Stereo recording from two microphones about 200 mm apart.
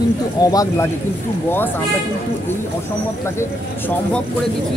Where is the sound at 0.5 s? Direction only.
15° left (ahead or behind).